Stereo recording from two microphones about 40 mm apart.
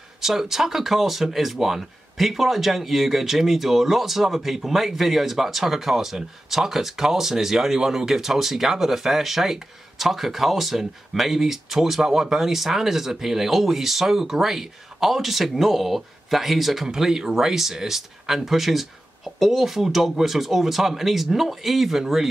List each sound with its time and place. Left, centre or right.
0.2 s speech: centre
16.8 s speech: centre